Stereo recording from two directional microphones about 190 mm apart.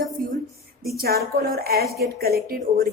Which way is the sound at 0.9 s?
55° right (ahead or behind).